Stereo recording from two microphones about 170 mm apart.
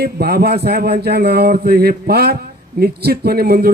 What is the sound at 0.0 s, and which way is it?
Speech, 65° right (ahead or behind).